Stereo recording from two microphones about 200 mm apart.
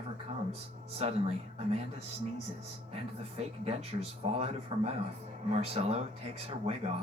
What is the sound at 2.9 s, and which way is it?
Speech, 30° right (ahead or behind).